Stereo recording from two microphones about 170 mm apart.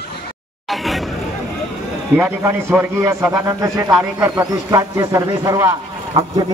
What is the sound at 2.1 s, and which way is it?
A man's voice, 10° right (ahead or behind).